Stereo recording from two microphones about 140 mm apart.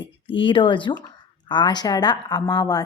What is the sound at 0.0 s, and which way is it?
Speech, 35° left (ahead or behind).